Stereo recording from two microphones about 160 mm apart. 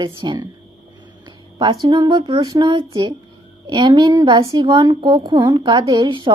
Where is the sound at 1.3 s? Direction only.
30° right (ahead or behind).